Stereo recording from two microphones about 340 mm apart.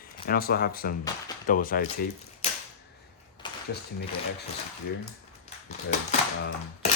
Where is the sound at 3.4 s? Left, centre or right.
Centre.